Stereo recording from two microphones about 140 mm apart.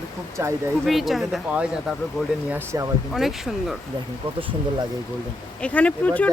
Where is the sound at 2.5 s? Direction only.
20° right (ahead or behind).